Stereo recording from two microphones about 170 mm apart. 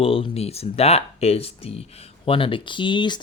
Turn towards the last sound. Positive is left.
turn(degrees=25)  # may be behind; listen again after turning